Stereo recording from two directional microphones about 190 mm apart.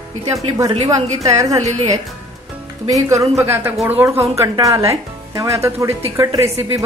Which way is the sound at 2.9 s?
15° right (ahead or behind).